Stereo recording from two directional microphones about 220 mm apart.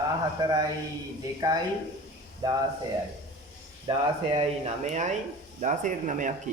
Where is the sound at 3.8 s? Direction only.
25° right (ahead or behind).